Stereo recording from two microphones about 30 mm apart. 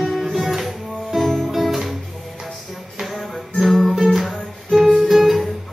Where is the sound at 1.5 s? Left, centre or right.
Centre.